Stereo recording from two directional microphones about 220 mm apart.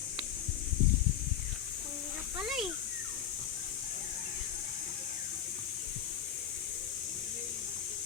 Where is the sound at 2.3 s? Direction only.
Centre (ahead or behind).